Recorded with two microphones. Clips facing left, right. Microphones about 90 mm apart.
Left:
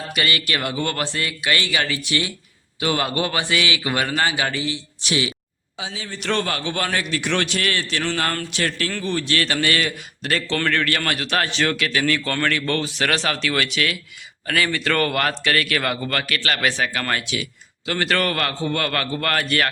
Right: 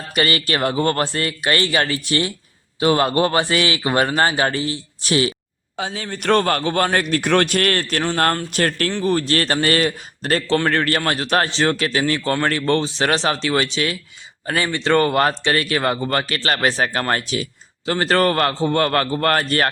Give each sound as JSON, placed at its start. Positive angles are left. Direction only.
{"t": 0.1, "sound": "speech", "side_deg": -35}
{"t": 5.7, "sound": "a man's voice", "side_deg": -50}